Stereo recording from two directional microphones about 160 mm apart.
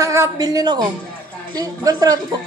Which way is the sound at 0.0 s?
20° right (ahead or behind).